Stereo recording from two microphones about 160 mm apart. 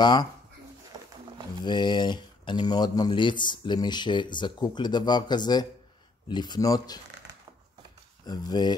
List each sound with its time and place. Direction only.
0.0 s speech: 25° left (ahead or behind)
1.6 s speech: 30° left (ahead or behind)
8.3 s speech: 25° left (ahead or behind)